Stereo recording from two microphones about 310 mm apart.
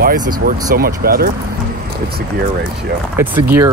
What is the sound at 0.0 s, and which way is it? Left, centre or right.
Speech, right.